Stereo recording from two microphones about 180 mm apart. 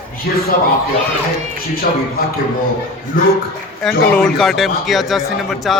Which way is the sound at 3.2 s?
50° left (ahead or behind).